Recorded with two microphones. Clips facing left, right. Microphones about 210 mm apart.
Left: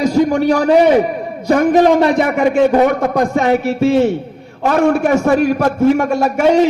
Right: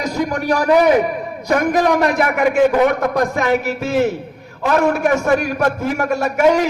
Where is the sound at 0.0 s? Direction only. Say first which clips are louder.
Left 8 dB; 30° left (ahead or behind).